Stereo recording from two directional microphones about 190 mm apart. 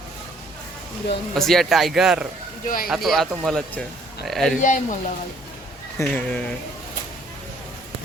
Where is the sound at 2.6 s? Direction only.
50° left (ahead or behind).